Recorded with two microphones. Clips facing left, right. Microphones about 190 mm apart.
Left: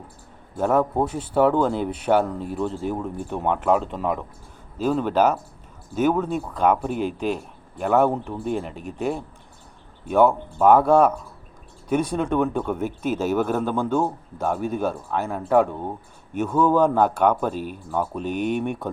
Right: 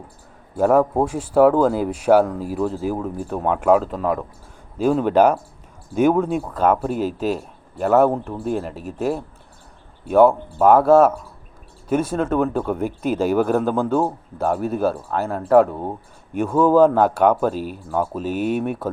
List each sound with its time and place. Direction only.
0.5 s speech: 5° right (ahead or behind)